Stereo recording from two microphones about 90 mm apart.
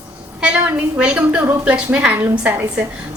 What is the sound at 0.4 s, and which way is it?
A woman's voice, 10° right (ahead or behind).